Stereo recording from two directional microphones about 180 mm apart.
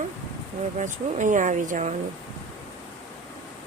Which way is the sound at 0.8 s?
45° right (ahead or behind).